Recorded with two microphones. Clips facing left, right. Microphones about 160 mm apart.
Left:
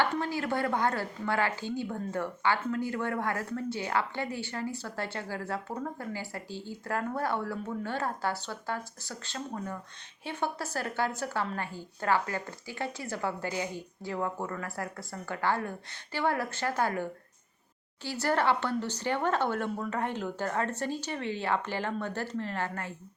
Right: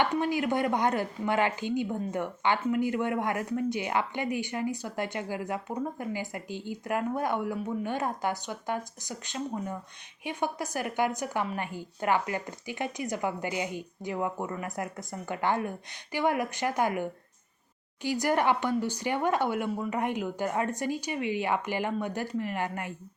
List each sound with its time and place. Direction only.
0.0 s speech: 15° right (ahead or behind)